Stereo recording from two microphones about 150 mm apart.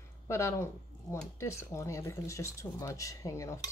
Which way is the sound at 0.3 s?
20° left (ahead or behind).